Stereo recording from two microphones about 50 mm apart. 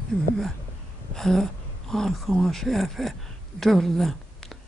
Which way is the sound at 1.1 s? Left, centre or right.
Centre.